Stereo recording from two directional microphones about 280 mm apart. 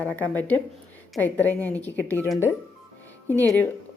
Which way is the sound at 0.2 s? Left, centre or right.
Centre.